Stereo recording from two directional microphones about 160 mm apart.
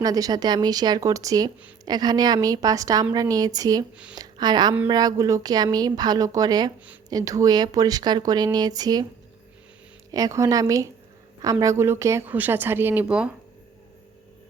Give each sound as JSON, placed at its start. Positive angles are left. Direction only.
{"t": 0.0, "sound": "a woman's voice", "side_deg": -25}
{"t": 10.1, "sound": "a woman's voice", "side_deg": -20}